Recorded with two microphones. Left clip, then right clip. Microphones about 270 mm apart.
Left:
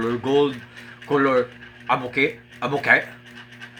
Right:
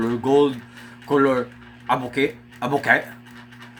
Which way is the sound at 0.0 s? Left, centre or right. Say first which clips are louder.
Right 2 dB; centre.